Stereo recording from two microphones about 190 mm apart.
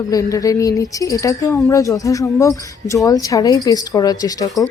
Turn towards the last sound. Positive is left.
turn(degrees=20)  # may be behind; listen again after turning